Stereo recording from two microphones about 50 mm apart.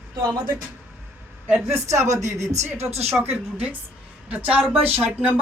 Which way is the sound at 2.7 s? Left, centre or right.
Right.